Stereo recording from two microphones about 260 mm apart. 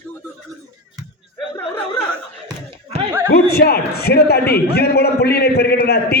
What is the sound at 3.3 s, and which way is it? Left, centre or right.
A man's voice, left.